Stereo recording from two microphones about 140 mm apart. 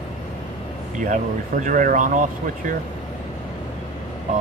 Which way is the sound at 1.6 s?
70° right (ahead or behind).